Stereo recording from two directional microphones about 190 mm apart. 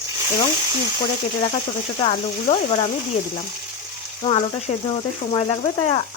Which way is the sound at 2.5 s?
30° left (ahead or behind).